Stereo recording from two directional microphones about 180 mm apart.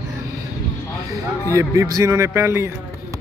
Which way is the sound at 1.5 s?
15° right (ahead or behind).